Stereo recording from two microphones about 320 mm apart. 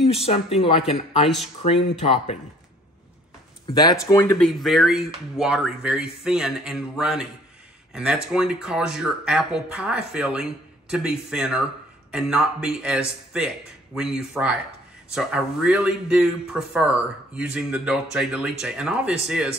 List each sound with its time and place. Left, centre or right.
0.0 s speech: centre
3.7 s speech: centre